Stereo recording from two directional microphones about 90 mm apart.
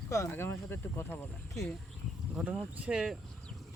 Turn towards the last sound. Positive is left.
turn(degrees=-10)  # may be behind; listen again after turning